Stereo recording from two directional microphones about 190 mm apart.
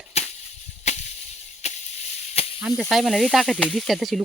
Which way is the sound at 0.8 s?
35° left (ahead or behind).